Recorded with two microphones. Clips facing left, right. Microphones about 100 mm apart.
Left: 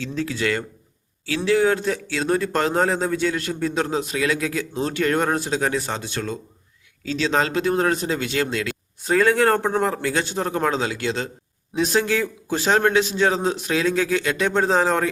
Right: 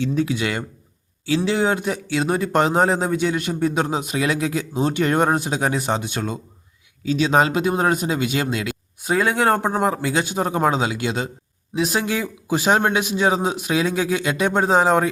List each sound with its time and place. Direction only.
0.0 s a man's voice: 15° right (ahead or behind)